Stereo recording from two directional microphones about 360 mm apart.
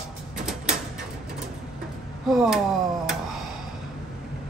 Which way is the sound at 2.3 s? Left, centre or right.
Centre.